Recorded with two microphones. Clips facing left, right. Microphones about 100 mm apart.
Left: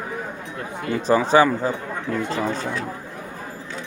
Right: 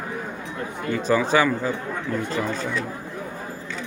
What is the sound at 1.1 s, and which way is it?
Speech, 30° left (ahead or behind).